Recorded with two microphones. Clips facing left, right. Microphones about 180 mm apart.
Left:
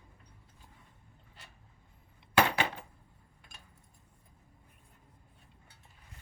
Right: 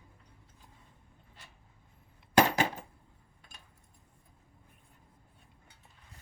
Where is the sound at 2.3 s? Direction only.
40° right (ahead or behind).